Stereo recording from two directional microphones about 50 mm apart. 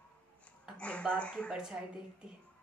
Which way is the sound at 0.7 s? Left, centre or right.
Left.